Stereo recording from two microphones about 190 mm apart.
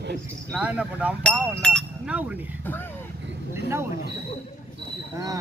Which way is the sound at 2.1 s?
5° right (ahead or behind).